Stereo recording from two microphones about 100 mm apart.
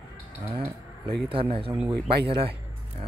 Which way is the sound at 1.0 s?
60° right (ahead or behind).